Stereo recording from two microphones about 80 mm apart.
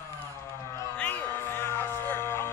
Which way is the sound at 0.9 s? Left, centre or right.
Left.